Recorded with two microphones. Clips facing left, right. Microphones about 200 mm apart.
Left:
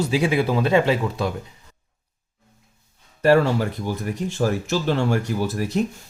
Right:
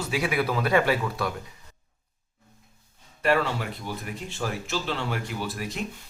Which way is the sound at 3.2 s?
40° left (ahead or behind).